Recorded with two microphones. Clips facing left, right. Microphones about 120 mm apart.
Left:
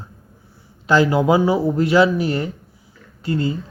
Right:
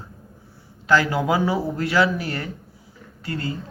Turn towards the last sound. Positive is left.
turn(degrees=20)  # may be behind; listen again after turning